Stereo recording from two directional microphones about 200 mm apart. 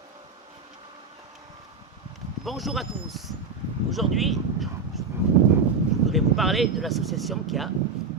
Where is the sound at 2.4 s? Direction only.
Centre (ahead or behind).